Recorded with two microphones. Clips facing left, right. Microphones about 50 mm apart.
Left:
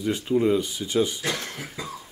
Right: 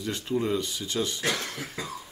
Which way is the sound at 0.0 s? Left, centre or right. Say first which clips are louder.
Left 6 dB; centre.